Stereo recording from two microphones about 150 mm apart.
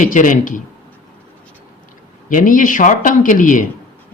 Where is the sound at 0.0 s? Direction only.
60° left (ahead or behind).